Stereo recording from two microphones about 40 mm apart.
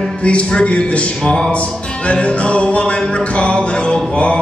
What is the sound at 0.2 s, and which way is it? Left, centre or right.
Speech, left.